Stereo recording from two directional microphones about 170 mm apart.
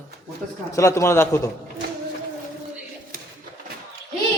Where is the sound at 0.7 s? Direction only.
15° left (ahead or behind).